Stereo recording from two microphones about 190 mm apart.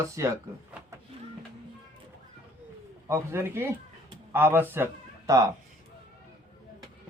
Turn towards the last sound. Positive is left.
turn(degrees=-15)  # may be behind; listen again after turning